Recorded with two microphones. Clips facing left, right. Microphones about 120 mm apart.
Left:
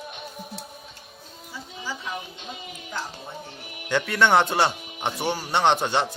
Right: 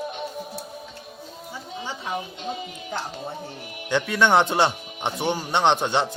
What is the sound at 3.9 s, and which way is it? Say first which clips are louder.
Speech: right 1 dB; 15° right (ahead or behind).